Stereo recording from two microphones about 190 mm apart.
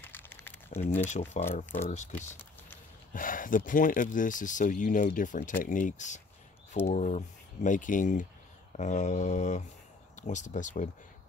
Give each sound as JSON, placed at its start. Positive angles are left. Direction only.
{"t": 0.1, "sound": "crumpling", "side_deg": 10}
{"t": 1.0, "sound": "speech", "side_deg": 40}